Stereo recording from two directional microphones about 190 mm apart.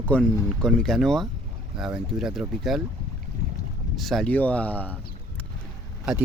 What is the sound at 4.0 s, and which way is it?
Speech, centre (ahead or behind).